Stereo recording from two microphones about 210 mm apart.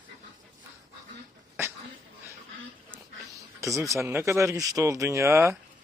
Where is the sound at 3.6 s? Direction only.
15° right (ahead or behind).